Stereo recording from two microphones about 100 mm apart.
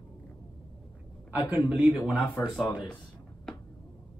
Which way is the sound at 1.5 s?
10° right (ahead or behind).